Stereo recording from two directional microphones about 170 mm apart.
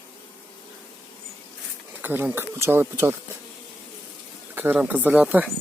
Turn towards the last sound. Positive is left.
turn(degrees=-5)  # may be behind; listen again after turning